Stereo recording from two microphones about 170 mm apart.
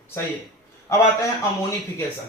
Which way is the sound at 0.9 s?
15° left (ahead or behind).